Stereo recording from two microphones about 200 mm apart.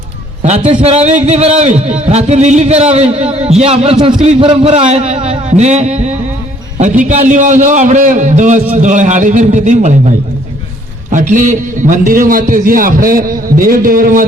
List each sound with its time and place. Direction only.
0.4 s a man's voice: 35° right (ahead or behind)
7.0 s a man's voice: 35° right (ahead or behind)